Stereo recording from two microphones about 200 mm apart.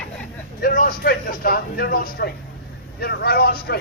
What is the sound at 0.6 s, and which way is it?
A man's voice, 40° left (ahead or behind).